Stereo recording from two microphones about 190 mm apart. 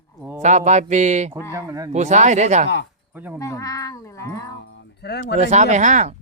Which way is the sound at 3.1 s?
10° right (ahead or behind).